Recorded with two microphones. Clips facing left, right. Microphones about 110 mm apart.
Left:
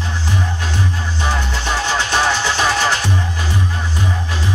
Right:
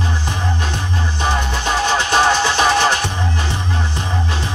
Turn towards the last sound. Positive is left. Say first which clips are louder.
# right 2 dB
turn(degrees=-20)  # may be behind; listen again after turning